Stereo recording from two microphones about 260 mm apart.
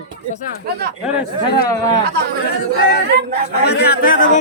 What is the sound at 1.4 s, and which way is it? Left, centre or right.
Speech, centre.